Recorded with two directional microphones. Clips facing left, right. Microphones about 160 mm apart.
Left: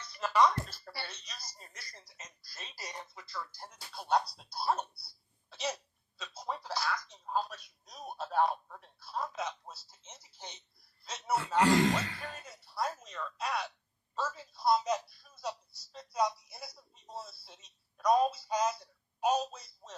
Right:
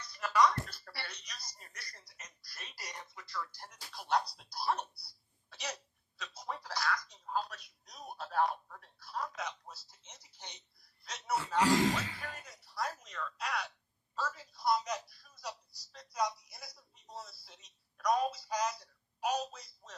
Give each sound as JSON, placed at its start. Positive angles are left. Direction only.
{"t": 0.0, "sound": "speech", "side_deg": 25}
{"t": 5.5, "sound": "hiccup", "side_deg": 25}
{"t": 6.1, "sound": "speech", "side_deg": 25}
{"t": 11.3, "sound": "speech", "side_deg": 0}
{"t": 12.3, "sound": "speech", "side_deg": 25}